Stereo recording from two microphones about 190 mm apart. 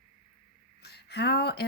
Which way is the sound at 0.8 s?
60° left (ahead or behind).